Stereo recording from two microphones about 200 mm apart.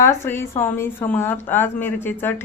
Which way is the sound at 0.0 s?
10° left (ahead or behind).